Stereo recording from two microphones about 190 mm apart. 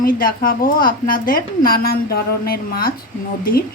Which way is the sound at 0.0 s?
50° left (ahead or behind).